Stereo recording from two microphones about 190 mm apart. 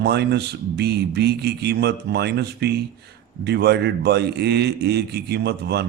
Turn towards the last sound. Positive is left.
turn(degrees=-60)  # may be behind; listen again after turning